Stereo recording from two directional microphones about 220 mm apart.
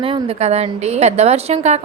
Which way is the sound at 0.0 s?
25° right (ahead or behind).